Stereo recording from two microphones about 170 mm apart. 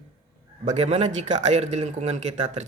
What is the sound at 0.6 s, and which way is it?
A man's voice, 45° right (ahead or behind).